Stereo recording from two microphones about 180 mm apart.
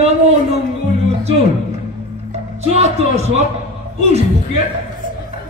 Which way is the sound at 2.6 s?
40° right (ahead or behind).